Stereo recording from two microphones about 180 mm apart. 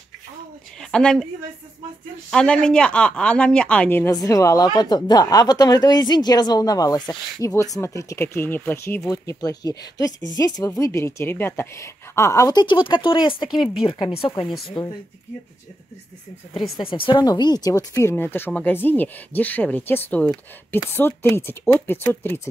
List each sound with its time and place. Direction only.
0.7 s a sound: 5° left (ahead or behind)
2.3 s speech: 5° left (ahead or behind); by 14.9 s 25° left (ahead or behind)
16.5 s speech: centre (ahead or behind)
16.8 s speech: 30° left (ahead or behind); by 22.5 s 10° left (ahead or behind)